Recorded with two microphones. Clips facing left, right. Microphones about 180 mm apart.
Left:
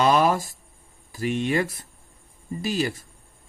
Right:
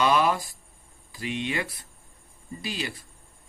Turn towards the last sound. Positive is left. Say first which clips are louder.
# left 8 dB
turn(degrees=45)  # may be behind; listen again after turning